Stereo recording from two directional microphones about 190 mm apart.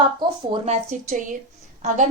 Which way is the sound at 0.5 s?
35° right (ahead or behind).